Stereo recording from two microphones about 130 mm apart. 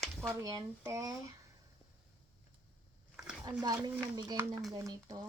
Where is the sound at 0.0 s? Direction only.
5° left (ahead or behind).